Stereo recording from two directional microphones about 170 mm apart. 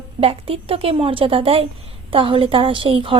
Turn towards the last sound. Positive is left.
turn(degrees=-30)  # may be behind; listen again after turning